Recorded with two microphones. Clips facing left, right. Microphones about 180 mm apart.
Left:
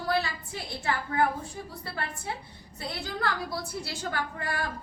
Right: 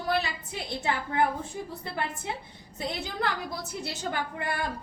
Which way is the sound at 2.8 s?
20° right (ahead or behind).